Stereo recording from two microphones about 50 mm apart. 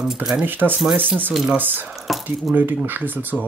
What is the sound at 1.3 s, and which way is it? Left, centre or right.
Speech, centre.